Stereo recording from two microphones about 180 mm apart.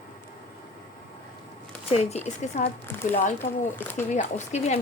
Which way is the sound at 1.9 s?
35° left (ahead or behind).